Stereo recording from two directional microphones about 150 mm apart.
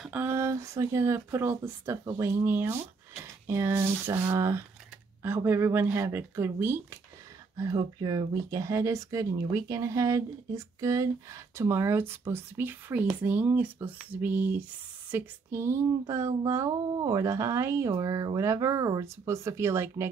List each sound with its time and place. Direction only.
0.1 s speech: 15° right (ahead or behind)